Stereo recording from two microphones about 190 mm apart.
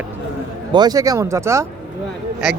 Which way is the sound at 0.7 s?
20° right (ahead or behind).